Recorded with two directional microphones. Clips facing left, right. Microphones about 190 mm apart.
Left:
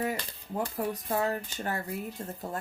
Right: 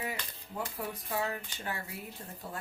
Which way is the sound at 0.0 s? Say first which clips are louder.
Left 7 dB; 40° left (ahead or behind).